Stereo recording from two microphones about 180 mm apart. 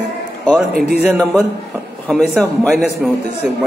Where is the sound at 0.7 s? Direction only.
60° right (ahead or behind).